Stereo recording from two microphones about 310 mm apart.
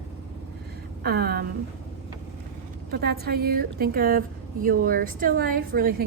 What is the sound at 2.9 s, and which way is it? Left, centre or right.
A woman's voice, right.